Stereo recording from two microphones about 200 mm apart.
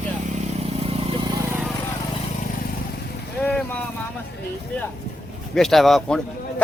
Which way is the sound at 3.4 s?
5° left (ahead or behind).